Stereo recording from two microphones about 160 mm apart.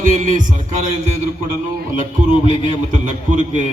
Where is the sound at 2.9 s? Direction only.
55° right (ahead or behind).